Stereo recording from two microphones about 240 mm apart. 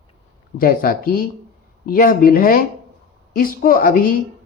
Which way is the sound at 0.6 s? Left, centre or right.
Left.